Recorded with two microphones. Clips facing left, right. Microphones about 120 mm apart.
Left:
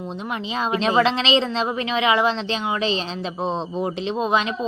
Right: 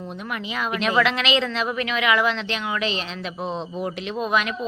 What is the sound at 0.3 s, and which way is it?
Speech, 25° left (ahead or behind).